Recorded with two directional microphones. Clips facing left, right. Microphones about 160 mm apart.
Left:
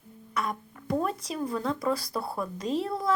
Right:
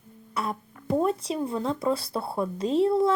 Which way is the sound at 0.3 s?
30° right (ahead or behind).